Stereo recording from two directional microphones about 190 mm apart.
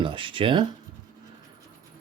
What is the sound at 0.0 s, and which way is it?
Speech, 25° right (ahead or behind).